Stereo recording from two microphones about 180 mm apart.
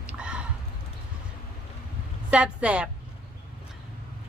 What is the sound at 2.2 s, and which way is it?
Speech, 5° right (ahead or behind).